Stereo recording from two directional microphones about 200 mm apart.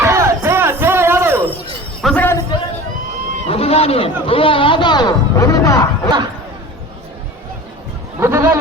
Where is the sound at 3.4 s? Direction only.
30° left (ahead or behind).